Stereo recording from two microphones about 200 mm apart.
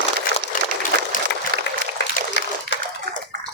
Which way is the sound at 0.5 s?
45° left (ahead or behind).